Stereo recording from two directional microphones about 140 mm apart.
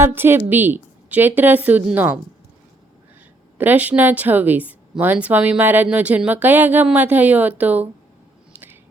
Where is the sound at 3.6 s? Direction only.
10° right (ahead or behind).